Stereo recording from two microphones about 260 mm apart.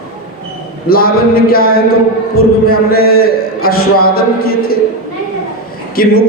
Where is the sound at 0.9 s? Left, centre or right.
Left.